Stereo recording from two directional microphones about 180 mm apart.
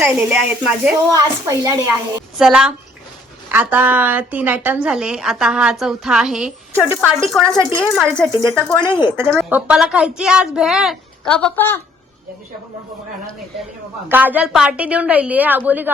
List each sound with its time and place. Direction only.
0.0 s a woman's voice: 10° right (ahead or behind)
1.1 s a woman's voice: 20° right (ahead or behind)
2.4 s a woman's voice: 5° right (ahead or behind)
9.3 s a woman's voice: 5° right (ahead or behind); by 11.8 s 10° left (ahead or behind)
14.1 s a woman's voice: 10° right (ahead or behind)